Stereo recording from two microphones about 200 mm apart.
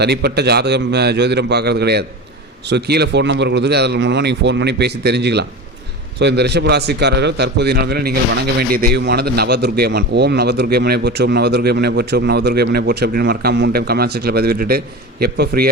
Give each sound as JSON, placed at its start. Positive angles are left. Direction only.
{"t": 0.0, "sound": "a man's voice", "side_deg": -55}